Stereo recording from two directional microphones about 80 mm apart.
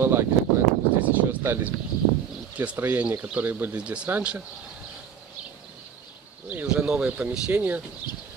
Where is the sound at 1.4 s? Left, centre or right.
Right.